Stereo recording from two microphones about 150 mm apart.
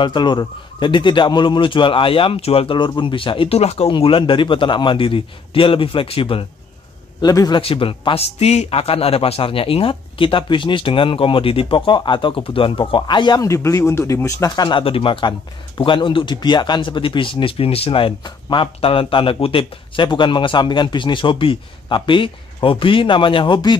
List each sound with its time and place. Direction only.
0.0 s speech: 30° left (ahead or behind)
7.2 s speech: 25° left (ahead or behind)